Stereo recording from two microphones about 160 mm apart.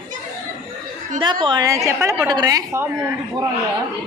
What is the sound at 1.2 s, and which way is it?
A woman's voice, 30° right (ahead or behind).